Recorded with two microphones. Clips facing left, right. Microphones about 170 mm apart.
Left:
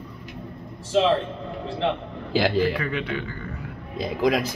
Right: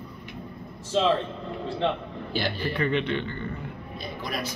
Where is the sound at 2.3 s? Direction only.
90° left.